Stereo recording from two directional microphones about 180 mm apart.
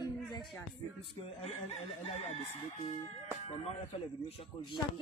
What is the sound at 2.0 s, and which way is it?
Speech, 35° left (ahead or behind).